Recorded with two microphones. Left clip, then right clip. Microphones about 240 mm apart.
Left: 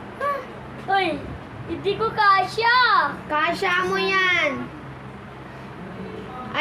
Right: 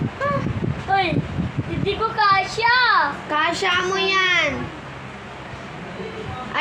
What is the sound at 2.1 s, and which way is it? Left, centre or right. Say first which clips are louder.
Speech: even; centre.